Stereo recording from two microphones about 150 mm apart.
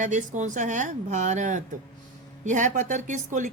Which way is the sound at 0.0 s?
55° right (ahead or behind).